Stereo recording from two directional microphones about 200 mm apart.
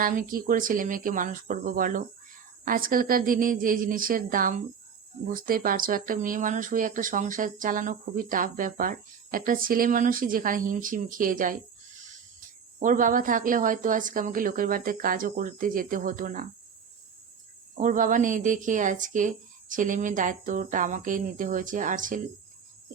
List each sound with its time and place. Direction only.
0.0 s speech: 45° right (ahead or behind)
12.8 s speech: 40° right (ahead or behind)
17.7 s speech: 40° right (ahead or behind)